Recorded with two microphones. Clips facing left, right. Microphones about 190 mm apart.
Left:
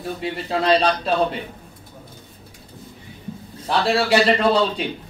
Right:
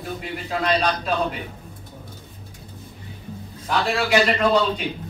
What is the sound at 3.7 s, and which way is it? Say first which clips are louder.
Speech: left 3 dB; 30° left (ahead or behind).